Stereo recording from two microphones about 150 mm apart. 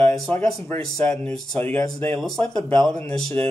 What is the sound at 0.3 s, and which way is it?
Speech, 10° left (ahead or behind).